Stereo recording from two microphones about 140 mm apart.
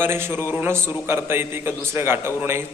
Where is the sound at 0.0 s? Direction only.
15° right (ahead or behind).